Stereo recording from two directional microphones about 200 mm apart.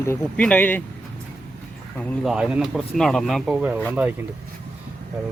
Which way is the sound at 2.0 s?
Centre (ahead or behind).